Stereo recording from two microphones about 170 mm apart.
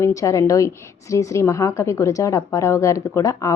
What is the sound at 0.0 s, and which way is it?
A woman's voice, 20° left (ahead or behind).